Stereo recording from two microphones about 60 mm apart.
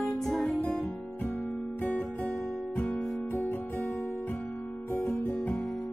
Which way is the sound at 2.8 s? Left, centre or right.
Left.